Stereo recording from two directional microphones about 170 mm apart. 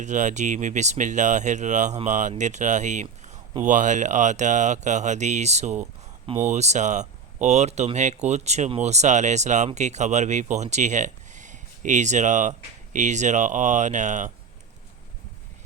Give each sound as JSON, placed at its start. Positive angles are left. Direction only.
{"t": 0.0, "sound": "speech", "side_deg": -45}